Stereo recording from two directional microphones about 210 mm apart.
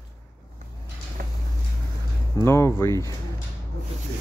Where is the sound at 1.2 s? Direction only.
40° right (ahead or behind).